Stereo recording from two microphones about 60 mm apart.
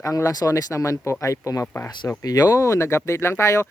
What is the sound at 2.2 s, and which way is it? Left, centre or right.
Speech, left.